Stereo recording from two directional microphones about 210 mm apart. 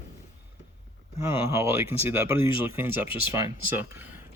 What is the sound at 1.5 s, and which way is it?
Speech, 15° right (ahead or behind).